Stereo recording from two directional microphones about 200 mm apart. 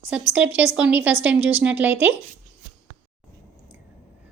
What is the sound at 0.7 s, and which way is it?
A woman's voice, 5° right (ahead or behind).